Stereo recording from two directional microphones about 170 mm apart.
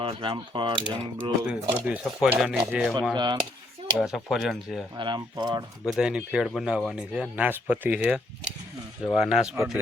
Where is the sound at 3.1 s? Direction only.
25° right (ahead or behind).